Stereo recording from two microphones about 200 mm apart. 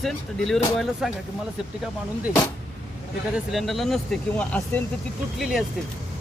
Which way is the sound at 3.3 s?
Centre (ahead or behind).